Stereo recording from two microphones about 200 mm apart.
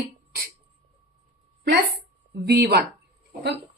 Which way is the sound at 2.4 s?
55° right (ahead or behind).